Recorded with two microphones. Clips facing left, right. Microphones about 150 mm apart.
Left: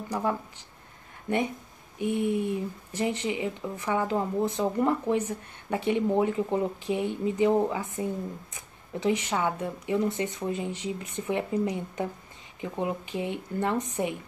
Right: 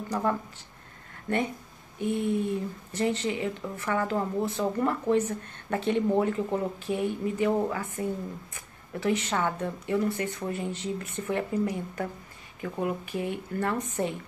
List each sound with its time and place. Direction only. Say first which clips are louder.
0.1 s speech: right 1 dB; 10° left (ahead or behind)